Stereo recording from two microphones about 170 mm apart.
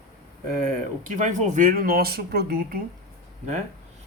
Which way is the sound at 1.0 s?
45° right (ahead or behind).